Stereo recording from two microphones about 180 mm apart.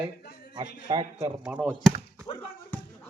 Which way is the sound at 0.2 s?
60° left (ahead or behind).